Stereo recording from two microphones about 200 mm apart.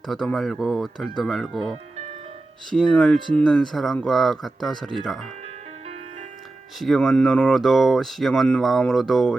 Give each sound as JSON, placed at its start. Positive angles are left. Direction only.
{"t": 0.1, "sound": "speech", "side_deg": 0}
{"t": 6.7, "sound": "speech", "side_deg": 0}